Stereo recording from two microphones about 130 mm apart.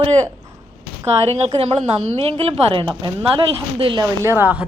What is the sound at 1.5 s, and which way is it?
A woman's voice, 50° right (ahead or behind).